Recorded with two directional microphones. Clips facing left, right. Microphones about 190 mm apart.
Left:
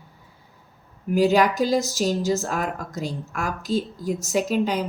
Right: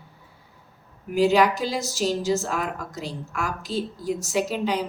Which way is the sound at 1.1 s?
45° left (ahead or behind).